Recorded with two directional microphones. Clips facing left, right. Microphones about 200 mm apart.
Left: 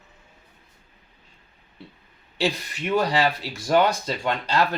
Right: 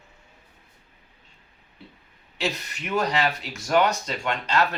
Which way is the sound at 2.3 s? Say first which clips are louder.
Left 4 dB; 30° left (ahead or behind).